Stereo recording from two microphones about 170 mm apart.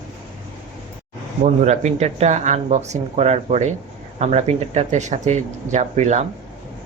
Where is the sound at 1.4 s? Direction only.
45° right (ahead or behind).